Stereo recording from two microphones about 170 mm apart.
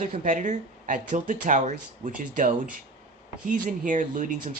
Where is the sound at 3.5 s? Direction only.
50° right (ahead or behind).